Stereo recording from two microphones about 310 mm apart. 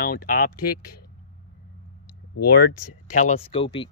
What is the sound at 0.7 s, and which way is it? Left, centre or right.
Speech, left.